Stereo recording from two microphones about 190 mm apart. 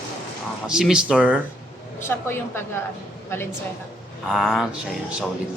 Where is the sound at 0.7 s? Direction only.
5° right (ahead or behind).